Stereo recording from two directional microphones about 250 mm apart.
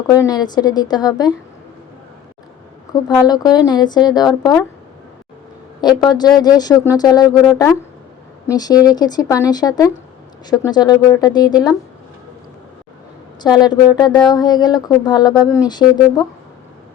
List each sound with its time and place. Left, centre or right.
0.1 s speech: centre
2.9 s speech: centre
5.8 s speech: centre
13.4 s speech: centre